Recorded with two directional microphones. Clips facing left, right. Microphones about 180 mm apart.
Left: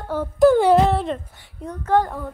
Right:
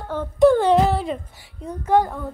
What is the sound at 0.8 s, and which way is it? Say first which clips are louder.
Female singing: left 1 dB; centre (ahead or behind).